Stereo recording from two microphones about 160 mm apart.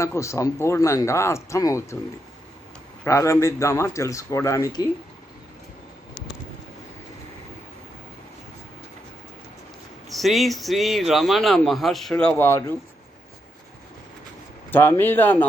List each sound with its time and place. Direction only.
0.0 s speech: 15° left (ahead or behind)
3.0 s speech: 20° left (ahead or behind)
10.1 s speech: centre (ahead or behind)
14.7 s speech: 15° left (ahead or behind)